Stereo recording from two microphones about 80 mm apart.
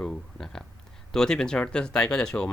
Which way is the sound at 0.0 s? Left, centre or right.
Centre.